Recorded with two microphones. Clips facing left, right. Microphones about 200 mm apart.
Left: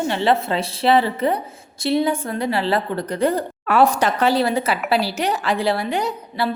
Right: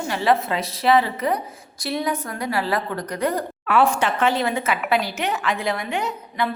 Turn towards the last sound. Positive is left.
turn(degrees=35)  # may be behind; listen again after turning